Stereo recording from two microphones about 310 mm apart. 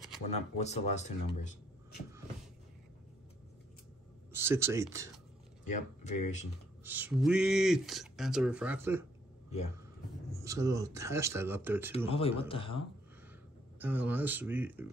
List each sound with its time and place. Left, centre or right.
0.6 s speech: left
4.3 s speech: centre
5.7 s speech: left
6.8 s speech: centre
10.3 s speech: centre
12.1 s speech: centre
13.7 s speech: centre